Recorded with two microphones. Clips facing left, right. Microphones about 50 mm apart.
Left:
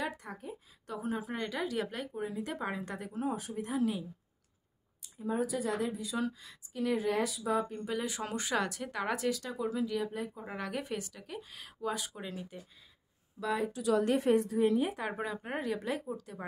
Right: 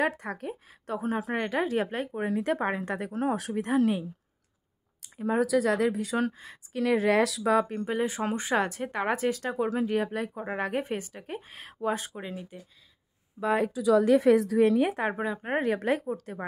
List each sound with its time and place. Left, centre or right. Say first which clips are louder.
0.0 s a woman's voice: right 9 dB; right
0.8 s speech: right 6 dB; right
2.2 s speech: right 10 dB; right
3.1 s a woman's voice: right 5 dB; right
5.0 s speech: right 7 dB; right
6.7 s a woman's voice: right 7 dB; right
7.8 s speech: right 7 dB; right
10.4 s speech: right 8 dB; right
12.2 s speech: right 4 dB; right
14.6 s speech: right 6 dB; right
15.1 s speech: right 6 dB; centre
15.4 s speech: right 11 dB; right